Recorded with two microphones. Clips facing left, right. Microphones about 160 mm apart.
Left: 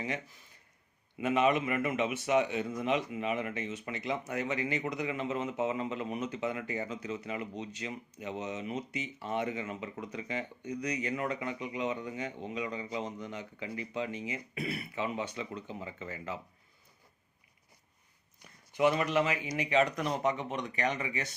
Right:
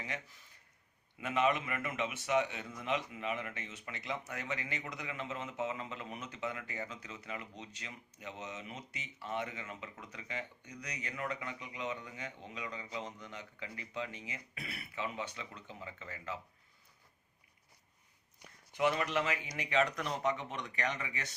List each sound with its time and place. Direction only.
1.2 s speech: 15° left (ahead or behind)
18.8 s speech: 15° left (ahead or behind)